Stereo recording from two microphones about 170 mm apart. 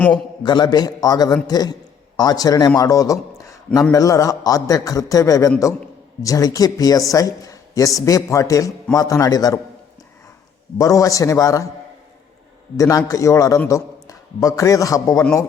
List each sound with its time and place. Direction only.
0.4 s a man's voice: 25° left (ahead or behind)
10.8 s speech: 20° left (ahead or behind)
12.7 s a man's voice: 20° left (ahead or behind)